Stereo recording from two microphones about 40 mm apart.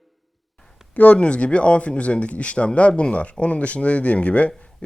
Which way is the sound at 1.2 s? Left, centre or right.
Left.